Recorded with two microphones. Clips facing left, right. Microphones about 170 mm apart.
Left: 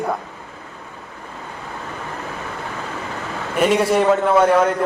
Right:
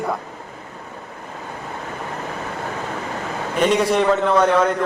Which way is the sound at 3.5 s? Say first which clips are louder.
Left 1 dB; 5° left (ahead or behind).